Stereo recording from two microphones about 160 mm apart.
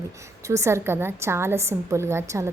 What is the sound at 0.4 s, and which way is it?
A woman's voice, 20° right (ahead or behind).